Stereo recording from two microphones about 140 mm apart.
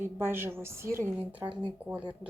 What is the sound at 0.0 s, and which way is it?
A woman's voice, 15° right (ahead or behind).